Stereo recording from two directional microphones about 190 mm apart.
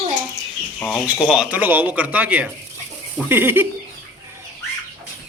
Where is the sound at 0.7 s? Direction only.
15° left (ahead or behind).